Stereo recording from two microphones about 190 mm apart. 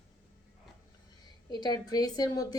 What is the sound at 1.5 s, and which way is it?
A woman's voice, 20° left (ahead or behind).